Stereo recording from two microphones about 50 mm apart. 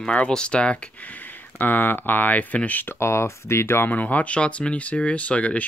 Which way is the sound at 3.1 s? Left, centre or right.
Left.